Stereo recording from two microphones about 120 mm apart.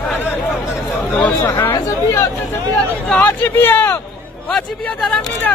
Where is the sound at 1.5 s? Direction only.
25° left (ahead or behind).